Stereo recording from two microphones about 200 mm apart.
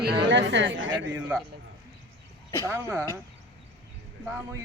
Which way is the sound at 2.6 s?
15° right (ahead or behind).